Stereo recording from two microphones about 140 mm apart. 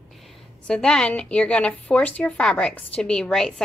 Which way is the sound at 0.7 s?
5° left (ahead or behind).